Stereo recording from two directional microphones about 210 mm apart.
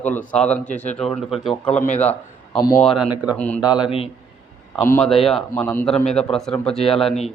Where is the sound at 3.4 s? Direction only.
5° left (ahead or behind).